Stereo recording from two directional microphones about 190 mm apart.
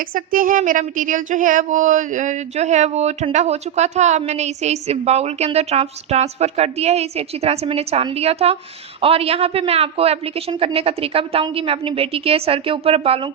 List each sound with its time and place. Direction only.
0.1 s speech: 45° right (ahead or behind); by 13.2 s 30° right (ahead or behind)